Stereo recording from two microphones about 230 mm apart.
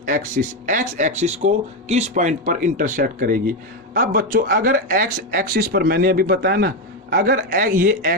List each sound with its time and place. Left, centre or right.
0.0 s speech: right